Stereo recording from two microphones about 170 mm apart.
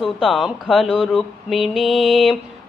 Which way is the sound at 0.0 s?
Centre (ahead or behind).